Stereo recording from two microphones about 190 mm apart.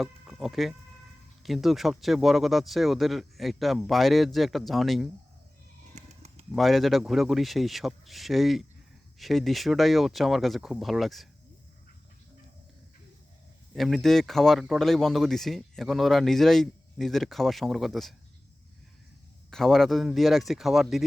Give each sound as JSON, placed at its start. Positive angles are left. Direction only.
{"t": 0.0, "sound": "speech", "side_deg": 0}
{"t": 5.9, "sound": "horse", "side_deg": -35}
{"t": 6.5, "sound": "speech", "side_deg": 0}
{"t": 13.7, "sound": "speech", "side_deg": 0}
{"t": 19.5, "sound": "speech", "side_deg": 0}